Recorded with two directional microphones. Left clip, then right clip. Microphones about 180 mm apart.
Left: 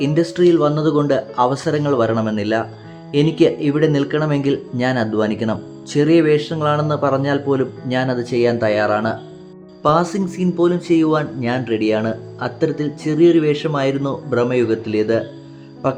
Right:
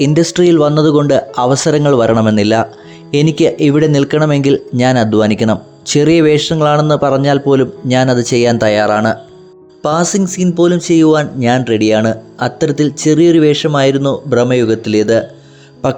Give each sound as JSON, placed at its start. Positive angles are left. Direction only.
{"t": 0.0, "sound": "speech", "side_deg": -40}
{"t": 9.8, "sound": "speech", "side_deg": -35}